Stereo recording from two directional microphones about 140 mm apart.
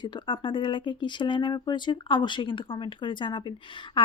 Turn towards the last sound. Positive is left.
turn(degrees=35)  # may be behind; listen again after turning